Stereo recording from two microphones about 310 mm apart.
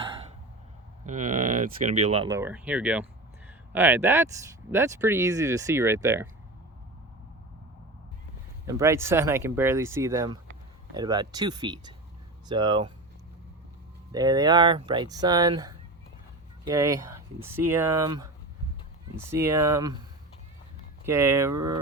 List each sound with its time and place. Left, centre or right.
1.0 s speech: right; by 6.2 s centre
8.6 s speech: centre
14.1 s speech: centre
21.0 s speech: centre